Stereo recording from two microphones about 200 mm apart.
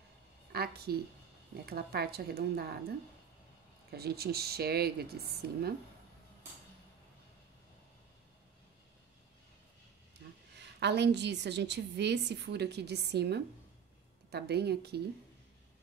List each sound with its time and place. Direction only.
0.5 s a woman's voice: 50° right (ahead or behind)
3.9 s speech: 50° right (ahead or behind)
10.5 s a woman's voice: 60° right (ahead or behind)